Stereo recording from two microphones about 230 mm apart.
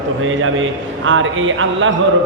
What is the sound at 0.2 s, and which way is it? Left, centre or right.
A man's voice, right.